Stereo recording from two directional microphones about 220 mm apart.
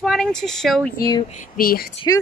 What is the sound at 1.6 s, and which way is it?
Speech, 40° left (ahead or behind).